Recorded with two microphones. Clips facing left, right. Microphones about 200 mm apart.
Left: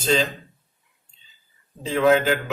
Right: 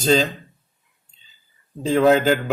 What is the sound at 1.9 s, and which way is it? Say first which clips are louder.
Speech: right 3 dB; 40° right (ahead or behind).